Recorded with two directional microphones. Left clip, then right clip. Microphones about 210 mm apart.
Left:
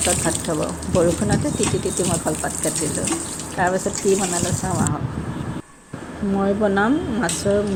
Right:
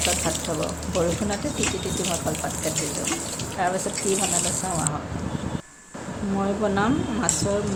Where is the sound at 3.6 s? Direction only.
15° left (ahead or behind).